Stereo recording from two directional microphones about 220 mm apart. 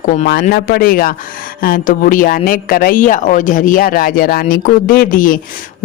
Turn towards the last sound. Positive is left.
turn(degrees=40)  # may be behind; listen again after turning